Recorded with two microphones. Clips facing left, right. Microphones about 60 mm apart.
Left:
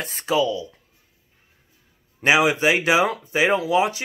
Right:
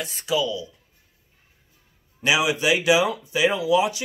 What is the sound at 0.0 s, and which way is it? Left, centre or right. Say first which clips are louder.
Speech: left 3 dB; left.